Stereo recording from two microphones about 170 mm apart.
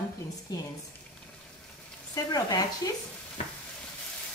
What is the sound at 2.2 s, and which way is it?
Speech, 20° left (ahead or behind).